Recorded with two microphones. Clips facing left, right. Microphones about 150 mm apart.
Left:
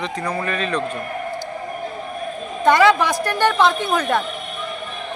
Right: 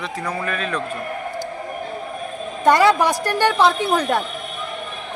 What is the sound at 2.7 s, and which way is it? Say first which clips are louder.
Speech: left 2 dB; 40° right (ahead or behind).